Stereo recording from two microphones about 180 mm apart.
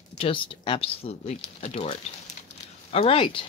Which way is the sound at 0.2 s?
30° left (ahead or behind).